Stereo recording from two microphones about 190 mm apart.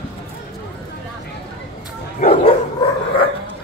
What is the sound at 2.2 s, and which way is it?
Bow-wow, 30° left (ahead or behind).